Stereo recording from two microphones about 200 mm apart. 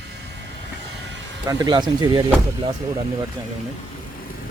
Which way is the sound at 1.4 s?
20° right (ahead or behind).